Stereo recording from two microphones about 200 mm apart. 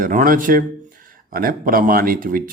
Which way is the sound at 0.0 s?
40° right (ahead or behind).